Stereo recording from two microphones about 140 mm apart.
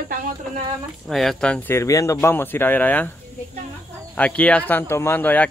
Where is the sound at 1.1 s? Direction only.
Centre (ahead or behind).